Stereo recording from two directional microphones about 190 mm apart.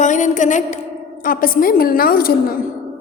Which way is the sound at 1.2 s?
45° left (ahead or behind).